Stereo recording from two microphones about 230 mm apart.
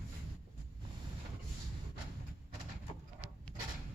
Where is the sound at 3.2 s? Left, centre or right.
Centre.